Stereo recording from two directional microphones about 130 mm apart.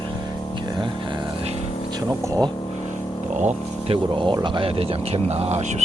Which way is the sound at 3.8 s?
40° right (ahead or behind).